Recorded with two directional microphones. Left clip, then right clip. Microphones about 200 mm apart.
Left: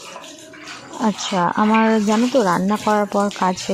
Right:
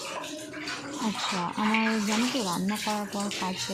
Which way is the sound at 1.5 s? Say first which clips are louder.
Left 12 dB; 35° left (ahead or behind).